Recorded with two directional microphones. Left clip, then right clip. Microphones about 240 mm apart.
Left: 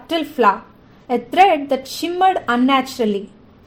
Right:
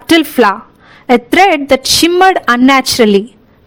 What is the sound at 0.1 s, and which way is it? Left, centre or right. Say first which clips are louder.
Speech: right 7 dB; right.